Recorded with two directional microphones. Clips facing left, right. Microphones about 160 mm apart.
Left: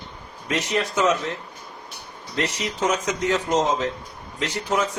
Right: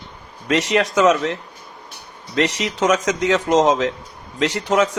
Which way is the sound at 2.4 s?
90° right.